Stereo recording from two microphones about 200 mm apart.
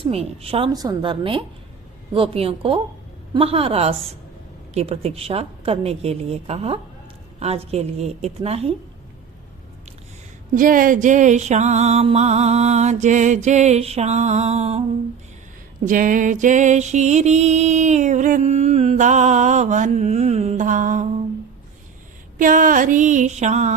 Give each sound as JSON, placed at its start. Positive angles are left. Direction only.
{"t": 0.0, "sound": "a woman's voice", "side_deg": -30}
{"t": 4.7, "sound": "music", "side_deg": -30}
{"t": 10.5, "sound": "music", "side_deg": -45}
{"t": 15.8, "sound": "music", "side_deg": -40}
{"t": 22.4, "sound": "music", "side_deg": -40}